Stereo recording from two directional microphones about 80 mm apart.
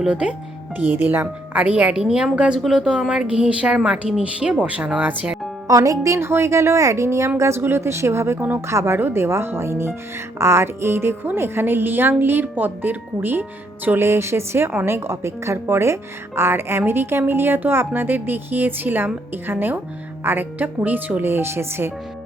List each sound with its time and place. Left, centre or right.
0.0 s a woman's voice: centre
5.6 s speech: right